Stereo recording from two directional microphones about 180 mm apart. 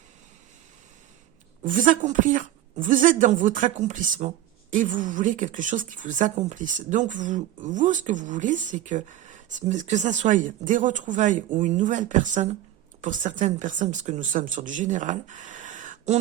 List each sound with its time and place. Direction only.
1.6 s a woman's voice: 45° right (ahead or behind)